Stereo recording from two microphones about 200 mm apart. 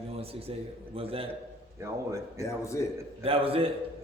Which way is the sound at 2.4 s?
15° left (ahead or behind).